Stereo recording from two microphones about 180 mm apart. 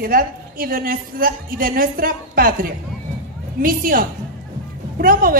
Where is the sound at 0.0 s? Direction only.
55° right (ahead or behind).